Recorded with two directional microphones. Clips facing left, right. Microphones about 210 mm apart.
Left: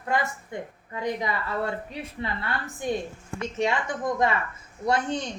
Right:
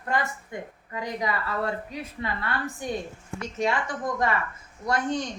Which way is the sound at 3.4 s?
25° left (ahead or behind).